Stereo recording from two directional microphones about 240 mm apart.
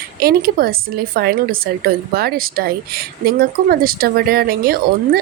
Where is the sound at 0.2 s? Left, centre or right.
Right.